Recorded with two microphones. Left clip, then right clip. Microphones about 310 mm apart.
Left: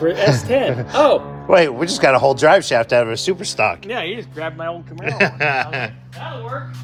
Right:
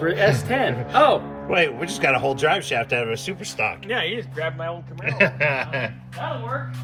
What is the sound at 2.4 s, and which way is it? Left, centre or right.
Speech, centre.